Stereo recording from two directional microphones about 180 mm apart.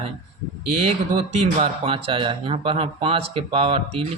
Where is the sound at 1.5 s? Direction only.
30° right (ahead or behind).